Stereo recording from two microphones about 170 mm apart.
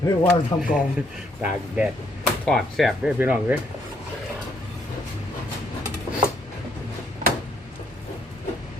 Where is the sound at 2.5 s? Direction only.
Centre (ahead or behind).